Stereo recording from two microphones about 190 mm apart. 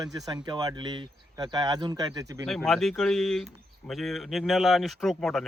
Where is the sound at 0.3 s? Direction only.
20° right (ahead or behind).